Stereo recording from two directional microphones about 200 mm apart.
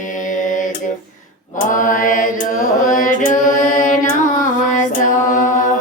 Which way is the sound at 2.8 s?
40° left (ahead or behind).